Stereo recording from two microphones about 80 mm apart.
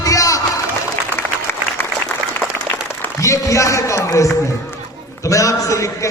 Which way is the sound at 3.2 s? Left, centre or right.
Left.